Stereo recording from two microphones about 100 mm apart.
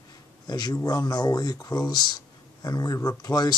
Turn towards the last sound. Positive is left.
turn(degrees=40)  # may be behind; listen again after turning